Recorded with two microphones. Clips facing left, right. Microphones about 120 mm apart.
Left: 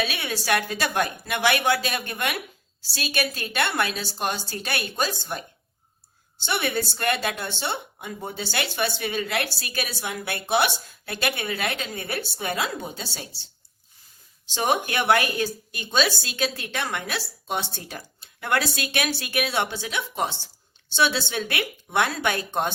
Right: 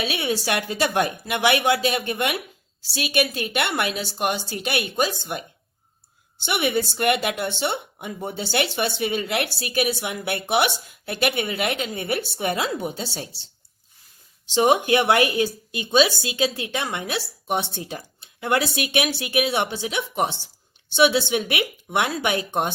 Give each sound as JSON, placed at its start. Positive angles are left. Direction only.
{"t": 0.0, "sound": "speech", "side_deg": -20}
{"t": 14.5, "sound": "speech", "side_deg": -20}